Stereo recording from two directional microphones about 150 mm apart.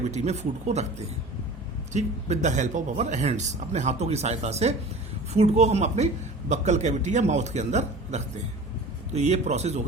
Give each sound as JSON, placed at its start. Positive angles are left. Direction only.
{"t": 0.1, "sound": "speech", "side_deg": -45}